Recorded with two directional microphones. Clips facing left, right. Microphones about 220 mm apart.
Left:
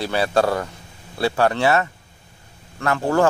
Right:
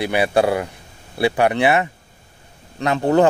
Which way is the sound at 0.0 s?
15° right (ahead or behind).